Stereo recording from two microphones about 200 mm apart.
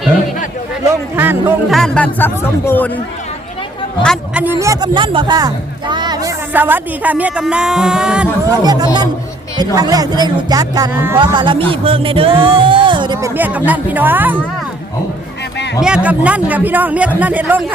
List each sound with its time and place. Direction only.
1.1 s speech: 10° right (ahead or behind)
1.7 s speech: 5° left (ahead or behind)
4.0 s speech: 5° left (ahead or behind)
4.6 s speech: 20° right (ahead or behind)
6.5 s speech: 10° right (ahead or behind)
8.4 s speech: 20° right (ahead or behind)
11.2 s speech: 25° right (ahead or behind)
13.3 s speech: 10° right (ahead or behind)
16.0 s speech: 5° right (ahead or behind)